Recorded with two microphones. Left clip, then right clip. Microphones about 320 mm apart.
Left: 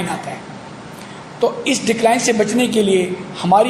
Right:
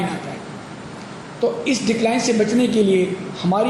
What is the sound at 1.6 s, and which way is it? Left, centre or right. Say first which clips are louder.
A woman's voice: left 4 dB; left.